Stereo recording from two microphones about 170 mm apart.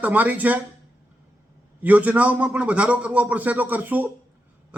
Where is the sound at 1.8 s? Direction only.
10° right (ahead or behind).